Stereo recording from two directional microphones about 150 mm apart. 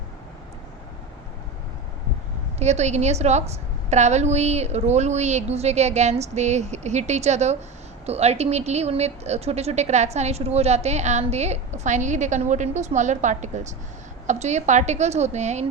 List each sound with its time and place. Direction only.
2.6 s speech: 50° right (ahead or behind)